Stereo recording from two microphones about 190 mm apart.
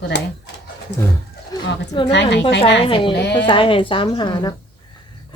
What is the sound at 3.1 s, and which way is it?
Speech, 65° left (ahead or behind).